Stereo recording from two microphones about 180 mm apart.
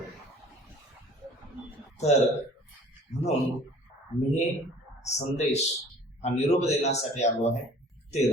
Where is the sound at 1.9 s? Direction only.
40° left (ahead or behind).